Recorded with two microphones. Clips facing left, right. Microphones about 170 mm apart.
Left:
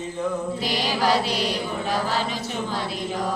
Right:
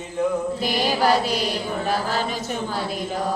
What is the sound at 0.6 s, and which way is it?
Mantra, 50° right (ahead or behind).